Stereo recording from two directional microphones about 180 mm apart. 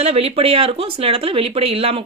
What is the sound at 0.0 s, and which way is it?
Speech, 35° right (ahead or behind).